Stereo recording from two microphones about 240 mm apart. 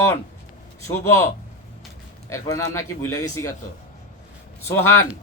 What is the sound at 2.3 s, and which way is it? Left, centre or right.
Speech, centre.